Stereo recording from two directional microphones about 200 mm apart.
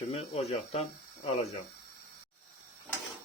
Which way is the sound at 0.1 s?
30° left (ahead or behind).